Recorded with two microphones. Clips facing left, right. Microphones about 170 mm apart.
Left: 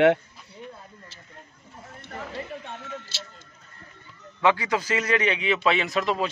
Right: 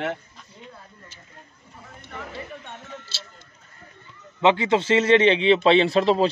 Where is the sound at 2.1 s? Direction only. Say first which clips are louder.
Left 1 dB; 40° left (ahead or behind).